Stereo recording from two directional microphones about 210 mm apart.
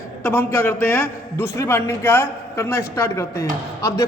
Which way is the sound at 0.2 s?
10° left (ahead or behind).